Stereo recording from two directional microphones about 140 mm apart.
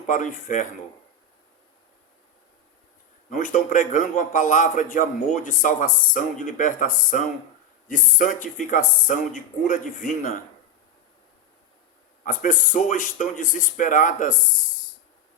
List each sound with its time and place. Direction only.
0.1 s a man's voice: 65° left (ahead or behind)
3.2 s a man's voice: 65° left (ahead or behind)
12.2 s speech: 70° left (ahead or behind)